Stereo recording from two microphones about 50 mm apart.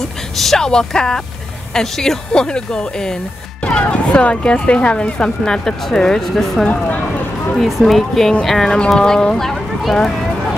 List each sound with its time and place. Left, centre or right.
0.4 s speech: centre
8.7 s speech: centre